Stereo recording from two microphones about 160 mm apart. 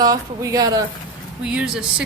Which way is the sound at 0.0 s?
20° right (ahead or behind).